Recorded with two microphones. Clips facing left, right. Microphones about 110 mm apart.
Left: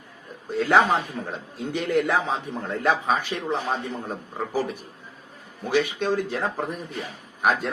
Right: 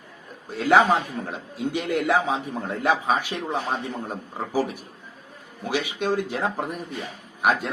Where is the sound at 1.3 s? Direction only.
10° right (ahead or behind).